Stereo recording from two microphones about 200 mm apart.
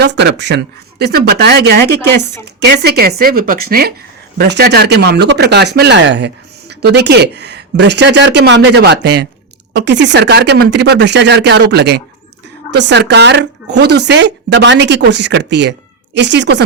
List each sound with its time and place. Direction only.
0.0 s speech: 60° right (ahead or behind)